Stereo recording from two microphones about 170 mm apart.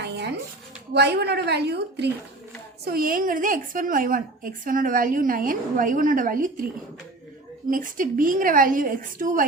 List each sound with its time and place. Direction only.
0.0 s a sound: 80° right
0.9 s a woman's voice: 75° right (ahead or behind)
2.8 s a woman's voice: 60° right (ahead or behind)
7.7 s a woman's voice: 50° right (ahead or behind)